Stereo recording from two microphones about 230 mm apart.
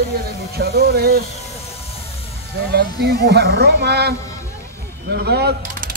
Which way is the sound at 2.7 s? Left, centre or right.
Right.